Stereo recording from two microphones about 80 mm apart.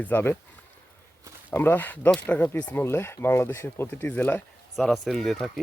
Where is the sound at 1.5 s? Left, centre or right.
Left.